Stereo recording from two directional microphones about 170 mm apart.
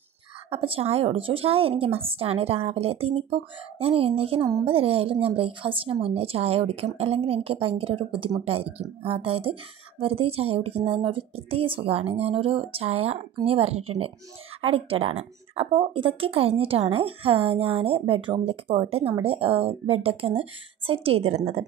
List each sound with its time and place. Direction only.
0.5 s a woman's voice: 35° right (ahead or behind)